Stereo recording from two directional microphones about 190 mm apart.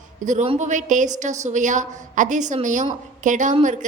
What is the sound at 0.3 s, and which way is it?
A woman's voice, 35° right (ahead or behind).